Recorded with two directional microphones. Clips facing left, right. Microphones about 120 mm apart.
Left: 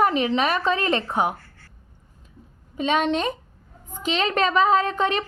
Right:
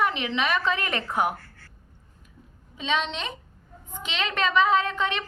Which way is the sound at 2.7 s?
50° left (ahead or behind).